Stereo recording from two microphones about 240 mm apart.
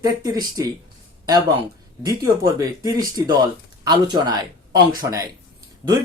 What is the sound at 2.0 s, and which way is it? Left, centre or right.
Speech, centre.